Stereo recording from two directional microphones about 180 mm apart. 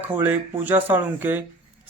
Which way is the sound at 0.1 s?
10° right (ahead or behind).